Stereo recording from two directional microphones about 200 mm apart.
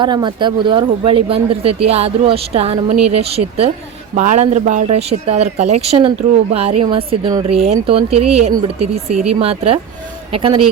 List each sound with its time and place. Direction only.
0.0 s speech: 20° right (ahead or behind)